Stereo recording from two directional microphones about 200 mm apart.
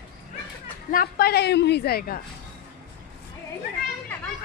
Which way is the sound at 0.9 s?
50° left (ahead or behind).